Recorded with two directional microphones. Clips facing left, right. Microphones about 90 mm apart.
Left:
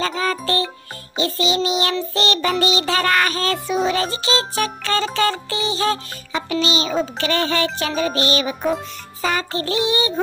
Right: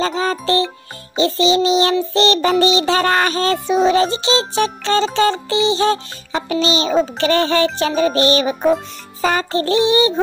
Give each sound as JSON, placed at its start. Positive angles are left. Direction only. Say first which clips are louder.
{"t": 0.0, "sound": "a child's voice", "louder": "right 3 dB", "side_deg": -30}
{"t": 7.2, "sound": "music", "louder": "right 5 dB", "side_deg": -35}